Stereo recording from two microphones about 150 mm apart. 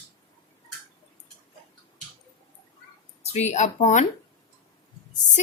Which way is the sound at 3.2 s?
45° left (ahead or behind).